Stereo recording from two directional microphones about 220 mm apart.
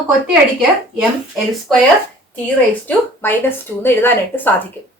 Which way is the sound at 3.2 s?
10° left (ahead or behind).